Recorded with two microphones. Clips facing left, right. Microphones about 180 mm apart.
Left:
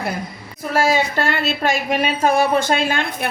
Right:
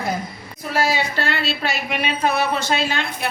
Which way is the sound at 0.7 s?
50° left (ahead or behind).